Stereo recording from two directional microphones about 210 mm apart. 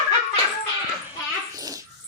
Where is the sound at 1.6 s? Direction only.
15° right (ahead or behind).